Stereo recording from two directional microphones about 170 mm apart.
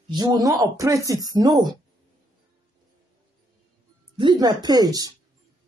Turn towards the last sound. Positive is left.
turn(degrees=-20)  # may be behind; listen again after turning